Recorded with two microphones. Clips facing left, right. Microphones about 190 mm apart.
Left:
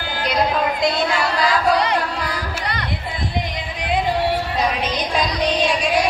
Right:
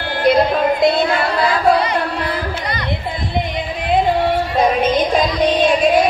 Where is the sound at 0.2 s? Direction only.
55° right (ahead or behind).